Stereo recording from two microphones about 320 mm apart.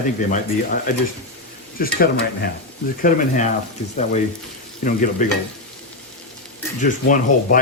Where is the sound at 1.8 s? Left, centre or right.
Left.